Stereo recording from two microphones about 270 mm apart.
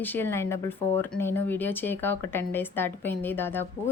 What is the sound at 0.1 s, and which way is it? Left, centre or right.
A woman's voice, centre.